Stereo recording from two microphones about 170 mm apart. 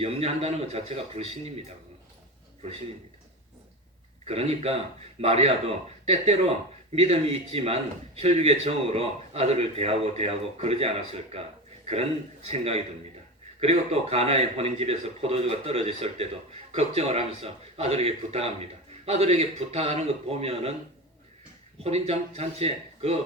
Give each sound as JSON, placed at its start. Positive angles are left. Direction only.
{"t": 0.0, "sound": "a man's voice", "side_deg": -35}
{"t": 4.3, "sound": "a man's voice", "side_deg": -35}
{"t": 12.5, "sound": "a man's voice", "side_deg": -35}
{"t": 21.8, "sound": "a man's voice", "side_deg": -40}